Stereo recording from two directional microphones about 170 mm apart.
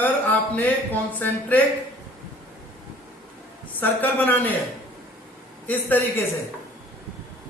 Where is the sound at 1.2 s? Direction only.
10° left (ahead or behind).